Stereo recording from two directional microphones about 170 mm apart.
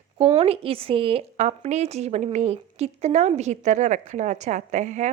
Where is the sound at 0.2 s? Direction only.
35° right (ahead or behind).